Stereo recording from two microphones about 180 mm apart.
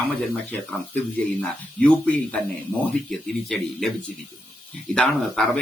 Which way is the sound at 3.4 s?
Centre (ahead or behind).